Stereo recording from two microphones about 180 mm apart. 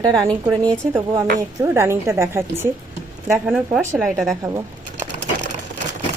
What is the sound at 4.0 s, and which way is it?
Speech, centre (ahead or behind).